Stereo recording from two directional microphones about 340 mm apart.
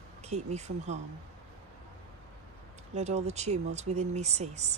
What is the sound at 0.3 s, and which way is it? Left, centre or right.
Speech, centre.